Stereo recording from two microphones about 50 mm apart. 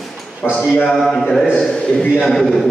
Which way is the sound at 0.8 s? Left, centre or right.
Centre.